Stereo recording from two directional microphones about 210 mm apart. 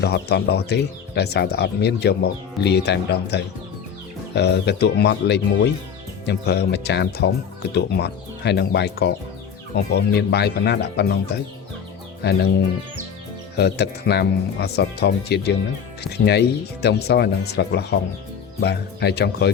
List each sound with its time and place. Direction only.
0.0 s speech: 50° left (ahead or behind)